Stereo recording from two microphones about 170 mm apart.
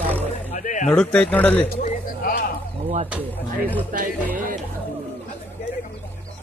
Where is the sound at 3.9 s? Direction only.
60° right (ahead or behind).